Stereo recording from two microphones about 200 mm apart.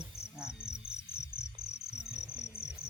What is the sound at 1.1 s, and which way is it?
Cricket, 10° left (ahead or behind).